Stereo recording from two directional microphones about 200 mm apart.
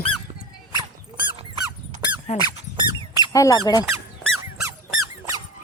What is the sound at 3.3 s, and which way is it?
Speech, 15° left (ahead or behind).